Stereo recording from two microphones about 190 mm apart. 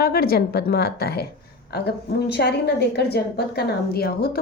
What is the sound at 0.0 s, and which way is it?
A woman's voice, 55° left (ahead or behind).